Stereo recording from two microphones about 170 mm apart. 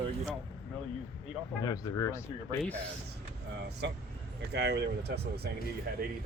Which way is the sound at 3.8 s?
90° right.